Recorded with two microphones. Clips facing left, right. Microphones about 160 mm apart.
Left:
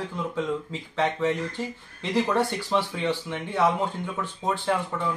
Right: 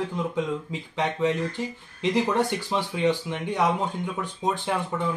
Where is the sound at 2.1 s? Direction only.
15° right (ahead or behind).